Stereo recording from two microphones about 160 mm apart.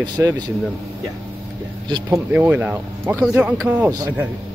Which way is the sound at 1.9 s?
20° right (ahead or behind).